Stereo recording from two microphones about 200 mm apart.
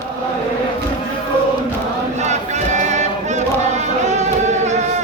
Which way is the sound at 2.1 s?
35° right (ahead or behind).